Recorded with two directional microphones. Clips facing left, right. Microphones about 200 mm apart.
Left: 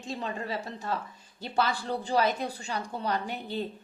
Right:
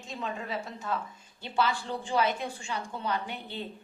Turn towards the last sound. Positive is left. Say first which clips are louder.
# left 4 dB
turn(degrees=40)  # may be behind; listen again after turning